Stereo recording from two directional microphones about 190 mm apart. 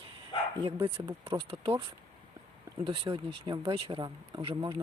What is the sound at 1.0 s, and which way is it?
Speech, 15° right (ahead or behind).